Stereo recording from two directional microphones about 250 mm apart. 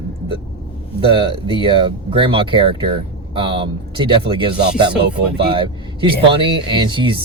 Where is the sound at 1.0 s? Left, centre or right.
Centre.